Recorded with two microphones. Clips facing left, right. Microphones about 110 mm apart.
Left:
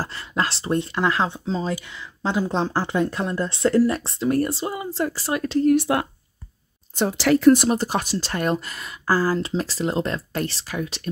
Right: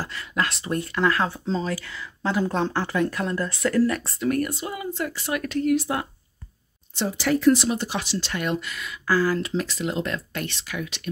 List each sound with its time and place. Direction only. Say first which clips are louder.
0.0 s speech: left 2 dB; 30° left (ahead or behind)
5.8 s a woman's voice: left 5 dB; 70° left (ahead or behind)
7.2 s speech: left 4 dB; 80° left
7.4 s speech: left 4 dB; 50° left (ahead or behind); by 11.0 s 35° left (ahead or behind)